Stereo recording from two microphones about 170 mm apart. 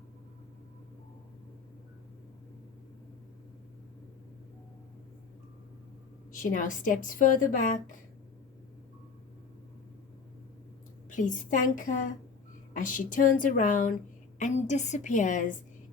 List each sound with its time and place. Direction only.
6.3 s a woman's voice: 50° left (ahead or behind)
11.1 s a woman's voice: 50° left (ahead or behind)